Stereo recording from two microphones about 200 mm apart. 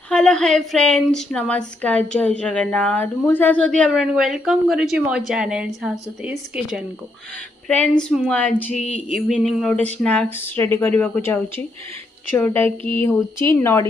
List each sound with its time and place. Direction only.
0.1 s a woman's voice: 5° left (ahead or behind)
8.0 s a woman's voice: centre (ahead or behind)